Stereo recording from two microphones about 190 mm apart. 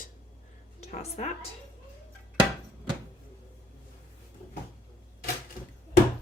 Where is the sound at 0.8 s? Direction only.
35° left (ahead or behind).